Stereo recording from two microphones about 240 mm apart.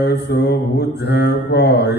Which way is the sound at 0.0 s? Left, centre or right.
Left.